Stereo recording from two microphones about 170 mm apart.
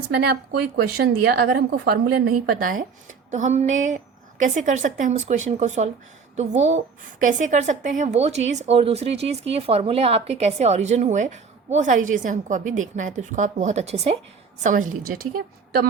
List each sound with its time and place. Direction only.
0.1 s a woman's voice: 70° right (ahead or behind)
3.3 s a woman's voice: 45° right (ahead or behind)
14.6 s a woman's voice: 50° right (ahead or behind)